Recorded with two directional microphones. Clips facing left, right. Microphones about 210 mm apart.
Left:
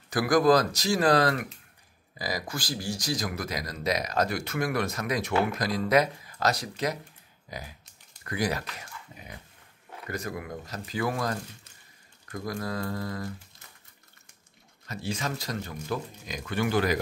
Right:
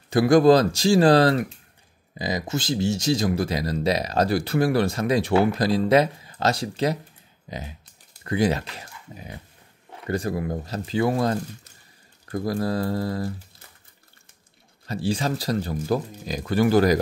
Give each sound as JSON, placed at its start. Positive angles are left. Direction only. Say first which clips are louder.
{"t": 0.1, "sound": "speech", "louder": "right 6 dB", "side_deg": -25}
{"t": 10.0, "sound": "speech", "louder": "right 9 dB", "side_deg": -30}
{"t": 14.9, "sound": "speech", "louder": "right 8 dB", "side_deg": -30}